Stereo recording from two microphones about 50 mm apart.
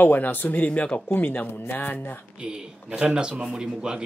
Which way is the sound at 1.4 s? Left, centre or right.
Left.